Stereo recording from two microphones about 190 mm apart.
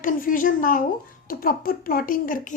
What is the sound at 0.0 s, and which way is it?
A woman's voice, 45° left (ahead or behind).